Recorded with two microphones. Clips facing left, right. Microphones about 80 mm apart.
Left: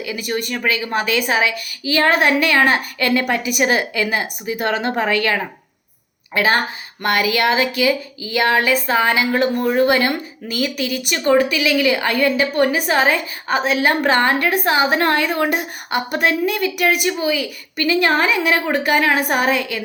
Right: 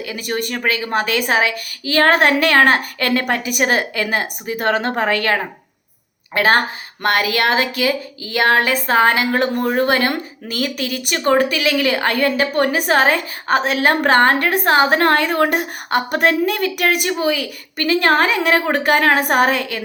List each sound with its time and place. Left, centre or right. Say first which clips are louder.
0.0 s a woman's voice: even; right
0.5 s a woman's voice: right 1 dB; right